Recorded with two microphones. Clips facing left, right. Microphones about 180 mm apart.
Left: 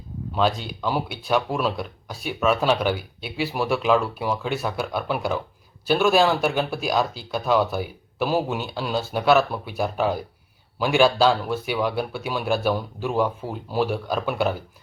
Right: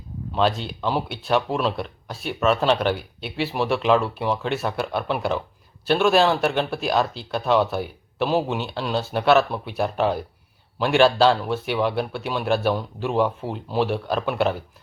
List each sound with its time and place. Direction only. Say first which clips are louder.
0.3 s speech: right 1 dB; centre (ahead or behind)